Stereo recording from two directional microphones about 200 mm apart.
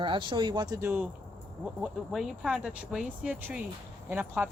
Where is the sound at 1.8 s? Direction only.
Centre (ahead or behind).